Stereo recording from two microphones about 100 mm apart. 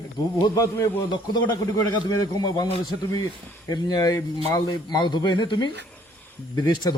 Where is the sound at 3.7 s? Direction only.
45° left (ahead or behind).